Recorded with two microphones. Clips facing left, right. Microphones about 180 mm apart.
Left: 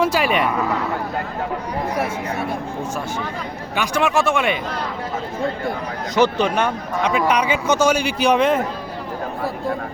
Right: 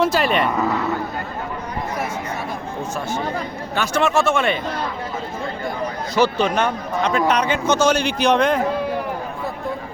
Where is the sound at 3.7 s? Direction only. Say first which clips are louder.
Even; 15° left (ahead or behind).